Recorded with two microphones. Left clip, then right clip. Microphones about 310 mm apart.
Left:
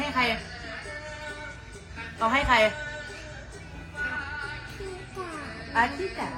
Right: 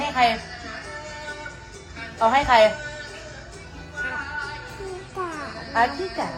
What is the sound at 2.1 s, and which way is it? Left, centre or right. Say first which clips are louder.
Speech: right 6 dB; right.